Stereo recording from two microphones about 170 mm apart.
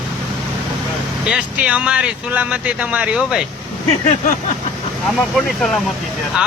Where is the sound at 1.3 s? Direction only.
5° right (ahead or behind).